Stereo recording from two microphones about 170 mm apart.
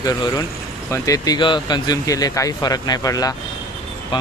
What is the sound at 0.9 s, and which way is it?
Speech, 20° left (ahead or behind).